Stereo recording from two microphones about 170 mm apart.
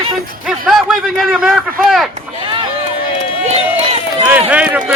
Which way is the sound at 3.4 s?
40° right (ahead or behind).